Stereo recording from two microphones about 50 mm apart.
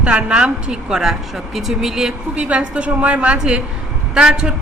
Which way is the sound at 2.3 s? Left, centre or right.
Right.